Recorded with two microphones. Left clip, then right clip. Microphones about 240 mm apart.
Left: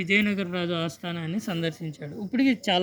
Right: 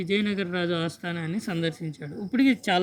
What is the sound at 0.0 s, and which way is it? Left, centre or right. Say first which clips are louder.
Speech: left 3 dB; centre.